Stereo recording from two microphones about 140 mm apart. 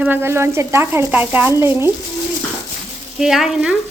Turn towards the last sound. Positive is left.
turn(degrees=-5)  # may be behind; listen again after turning